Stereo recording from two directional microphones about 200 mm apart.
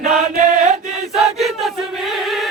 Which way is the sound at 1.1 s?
Centre (ahead or behind).